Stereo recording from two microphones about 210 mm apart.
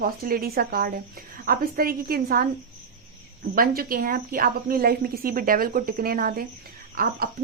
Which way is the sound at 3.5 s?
45° right (ahead or behind).